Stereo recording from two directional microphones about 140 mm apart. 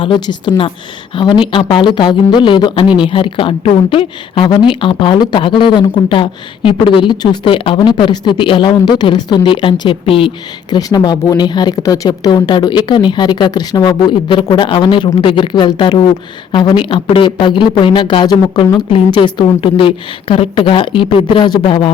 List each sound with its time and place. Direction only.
0.0 s speech: 35° left (ahead or behind)
2.8 s speech: 5° right (ahead or behind)
3.1 s speech: 40° left (ahead or behind)
10.8 s speech: 30° left (ahead or behind)